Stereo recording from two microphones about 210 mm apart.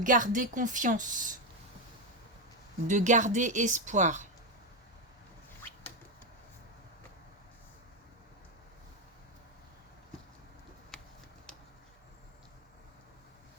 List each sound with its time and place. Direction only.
0.0 s a woman's voice: 40° right (ahead or behind)
2.8 s a woman's voice: 35° right (ahead or behind)